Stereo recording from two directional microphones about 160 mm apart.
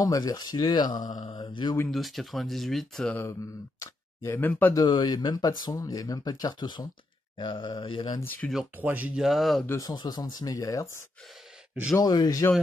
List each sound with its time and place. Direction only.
0.0 s speech: 20° left (ahead or behind)
1.8 s speech: centre (ahead or behind)
3.8 s speech: 15° left (ahead or behind)
4.7 s speech: 25° left (ahead or behind)
8.2 s speech: 10° left (ahead or behind)
8.5 s speech: 10° right (ahead or behind)
9.7 s speech: 25° left (ahead or behind)
11.9 s speech: 25° left (ahead or behind)